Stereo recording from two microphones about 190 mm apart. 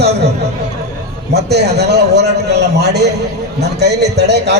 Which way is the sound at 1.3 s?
60° right (ahead or behind).